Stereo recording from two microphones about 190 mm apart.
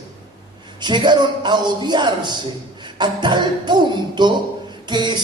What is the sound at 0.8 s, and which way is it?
Speech, 25° right (ahead or behind).